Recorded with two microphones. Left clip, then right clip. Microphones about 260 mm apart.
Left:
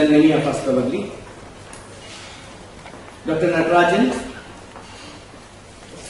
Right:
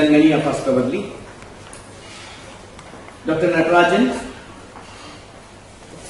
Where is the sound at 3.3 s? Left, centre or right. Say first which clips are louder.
Right 1 dB; centre.